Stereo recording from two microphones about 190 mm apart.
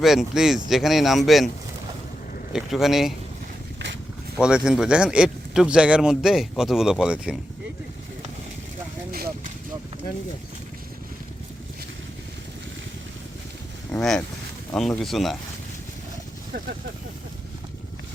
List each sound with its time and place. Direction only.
0.0 s speech: centre (ahead or behind)
2.5 s speech: centre (ahead or behind)
4.4 s speech: 5° right (ahead or behind)
9.1 s a sound: 50° right (ahead or behind)
13.9 s speech: 5° left (ahead or behind)